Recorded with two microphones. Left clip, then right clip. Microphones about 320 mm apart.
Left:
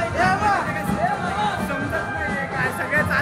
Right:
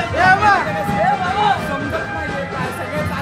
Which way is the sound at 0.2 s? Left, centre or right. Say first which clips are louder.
Right 8 dB; right.